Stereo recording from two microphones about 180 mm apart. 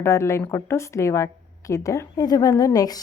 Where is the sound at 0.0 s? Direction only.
15° left (ahead or behind).